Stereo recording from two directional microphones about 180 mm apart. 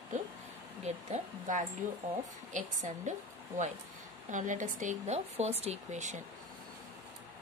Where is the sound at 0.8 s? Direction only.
40° right (ahead or behind).